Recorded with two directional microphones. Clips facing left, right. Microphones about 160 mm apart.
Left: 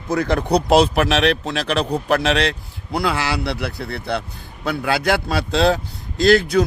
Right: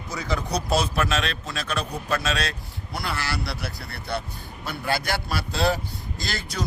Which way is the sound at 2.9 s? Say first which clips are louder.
Left 9 dB; 90° left.